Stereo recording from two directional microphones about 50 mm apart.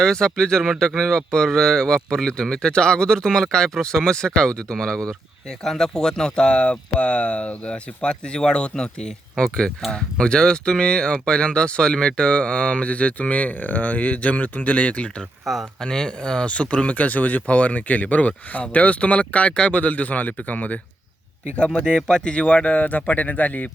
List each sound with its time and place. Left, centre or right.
0.0 s speech: centre
15.5 s speech: centre
15.8 s speech: centre; by 20.7 s left
21.5 s speech: left